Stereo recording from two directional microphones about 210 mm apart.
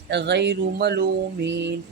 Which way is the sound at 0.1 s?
55° right (ahead or behind).